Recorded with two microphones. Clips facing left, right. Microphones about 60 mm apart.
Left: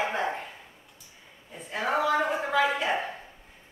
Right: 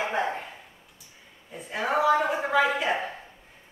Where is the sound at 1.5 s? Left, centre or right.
Centre.